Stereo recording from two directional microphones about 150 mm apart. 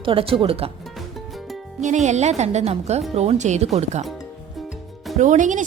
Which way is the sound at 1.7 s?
55° right (ahead or behind).